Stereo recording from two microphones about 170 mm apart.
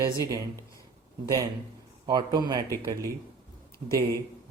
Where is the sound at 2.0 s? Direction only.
25° right (ahead or behind).